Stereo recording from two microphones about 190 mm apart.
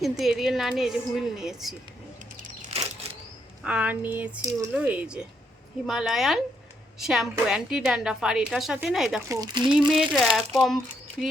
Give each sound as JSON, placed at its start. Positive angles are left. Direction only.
{"t": 0.0, "sound": "a woman's voice", "side_deg": 0}
{"t": 2.6, "sound": "a sound", "side_deg": -35}
{"t": 3.6, "sound": "a woman's voice", "side_deg": -5}
{"t": 9.3, "sound": "speech", "side_deg": -20}
{"t": 9.8, "sound": "a woman's voice", "side_deg": 0}